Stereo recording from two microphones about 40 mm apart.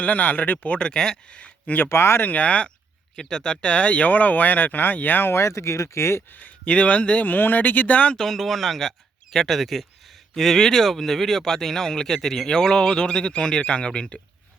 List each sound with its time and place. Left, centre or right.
0.0 s speech: left
0.8 s speech: centre
1.3 s speech: left
1.9 s speech: left
2.2 s speech: left
3.2 s speech: centre
4.1 s speech: left
6.7 s speech: left
7.3 s speech: left
8.3 s speech: centre; by 14.2 s left